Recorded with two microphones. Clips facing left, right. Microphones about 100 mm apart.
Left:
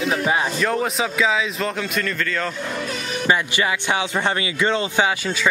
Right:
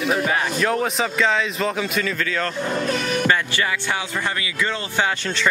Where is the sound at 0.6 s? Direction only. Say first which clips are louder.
Even; centre (ahead or behind).